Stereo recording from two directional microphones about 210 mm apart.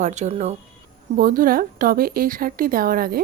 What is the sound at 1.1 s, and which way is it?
A woman's voice, 45° right (ahead or behind).